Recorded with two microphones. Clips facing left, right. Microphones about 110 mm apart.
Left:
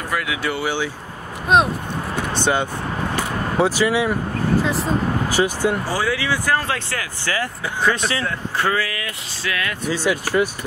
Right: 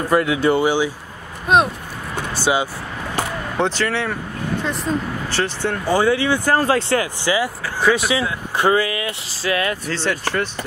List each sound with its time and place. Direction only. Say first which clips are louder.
0.1 s speech: right 8 dB; 35° right (ahead or behind)
0.7 s speech: right 5 dB; 15° right (ahead or behind)
1.5 s speech: even; centre (ahead or behind)
3.5 s speech: left 3 dB; 5° left (ahead or behind)
5.9 s speech: right 5 dB; 25° right (ahead or behind)
6.5 s speech: right 5 dB; 35° right (ahead or behind)
7.3 s speech: right 2 dB; 15° right (ahead or behind)
8.5 s speech: right 5 dB; 20° right (ahead or behind)
9.8 s speech: left 1 dB; 10° left (ahead or behind)